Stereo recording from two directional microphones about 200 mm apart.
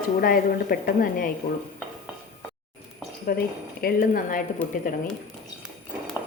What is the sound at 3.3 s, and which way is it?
A woman's voice, 50° left (ahead or behind).